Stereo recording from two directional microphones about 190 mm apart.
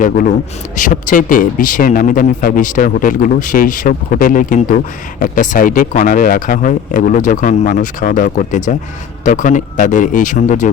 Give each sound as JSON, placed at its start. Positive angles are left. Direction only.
{"t": 0.0, "sound": "speech", "side_deg": 45}